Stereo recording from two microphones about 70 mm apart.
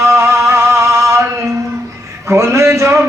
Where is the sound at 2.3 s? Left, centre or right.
Right.